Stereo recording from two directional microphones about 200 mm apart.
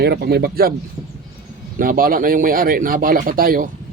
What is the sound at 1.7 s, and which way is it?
Speech, 45° right (ahead or behind).